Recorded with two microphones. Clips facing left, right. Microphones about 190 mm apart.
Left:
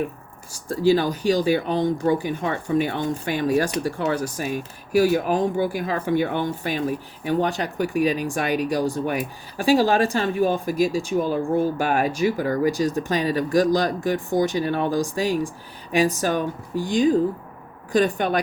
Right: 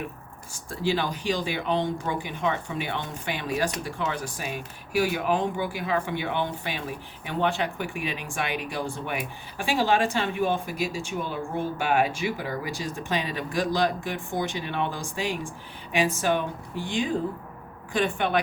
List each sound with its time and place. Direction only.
0.5 s speech: 40° left (ahead or behind)